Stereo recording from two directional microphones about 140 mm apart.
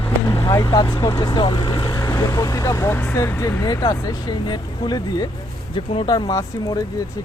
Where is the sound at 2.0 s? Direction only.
20° left (ahead or behind).